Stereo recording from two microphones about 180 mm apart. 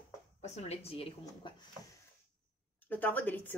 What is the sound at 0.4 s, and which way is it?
Speech, 35° left (ahead or behind).